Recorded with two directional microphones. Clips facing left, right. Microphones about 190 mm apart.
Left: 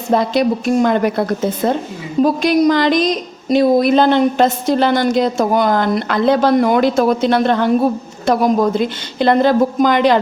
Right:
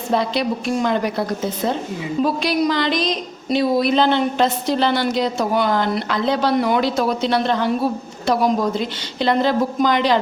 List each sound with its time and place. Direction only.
0.1 s a woman's voice: 45° left (ahead or behind)